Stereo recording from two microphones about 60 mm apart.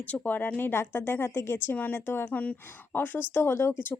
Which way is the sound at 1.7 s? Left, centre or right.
Left.